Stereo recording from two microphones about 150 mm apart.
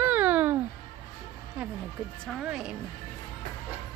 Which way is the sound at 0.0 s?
10° right (ahead or behind).